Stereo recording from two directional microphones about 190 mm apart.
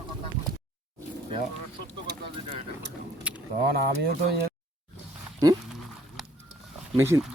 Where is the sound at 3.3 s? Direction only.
5° right (ahead or behind).